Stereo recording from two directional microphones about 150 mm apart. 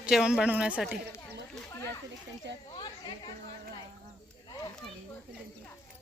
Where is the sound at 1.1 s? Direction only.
15° left (ahead or behind).